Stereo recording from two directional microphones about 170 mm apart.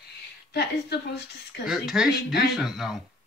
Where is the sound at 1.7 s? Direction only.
5° right (ahead or behind).